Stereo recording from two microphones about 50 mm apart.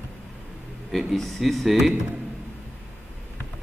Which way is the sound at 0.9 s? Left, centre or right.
Centre.